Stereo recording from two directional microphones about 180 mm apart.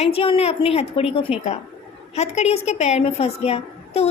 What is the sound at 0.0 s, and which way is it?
A woman's voice, 35° left (ahead or behind).